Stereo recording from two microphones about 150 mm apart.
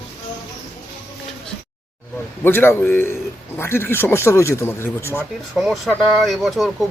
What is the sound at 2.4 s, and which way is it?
Speech, 15° left (ahead or behind).